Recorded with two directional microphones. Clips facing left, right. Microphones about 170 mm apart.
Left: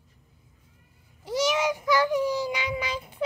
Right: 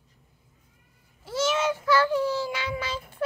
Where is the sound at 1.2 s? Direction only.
15° left (ahead or behind).